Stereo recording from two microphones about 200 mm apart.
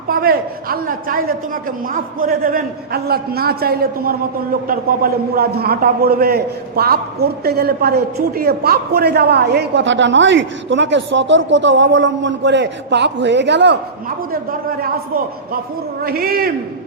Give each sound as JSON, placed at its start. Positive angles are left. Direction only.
{"t": 0.1, "sound": "a man's voice", "side_deg": -50}
{"t": 14.8, "sound": "a man's voice", "side_deg": -45}